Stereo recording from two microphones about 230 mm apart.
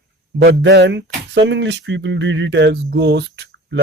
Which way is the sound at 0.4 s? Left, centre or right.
Right.